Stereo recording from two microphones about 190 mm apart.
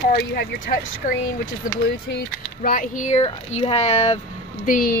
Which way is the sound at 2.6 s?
45° left (ahead or behind).